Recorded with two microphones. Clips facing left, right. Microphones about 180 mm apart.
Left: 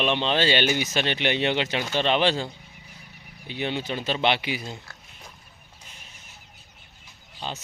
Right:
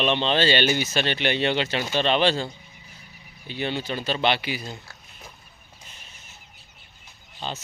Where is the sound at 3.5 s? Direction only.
15° left (ahead or behind).